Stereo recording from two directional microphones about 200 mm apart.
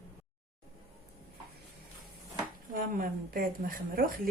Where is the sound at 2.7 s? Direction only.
45° right (ahead or behind).